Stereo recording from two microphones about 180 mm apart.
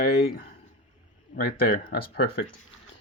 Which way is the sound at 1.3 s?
55° left (ahead or behind).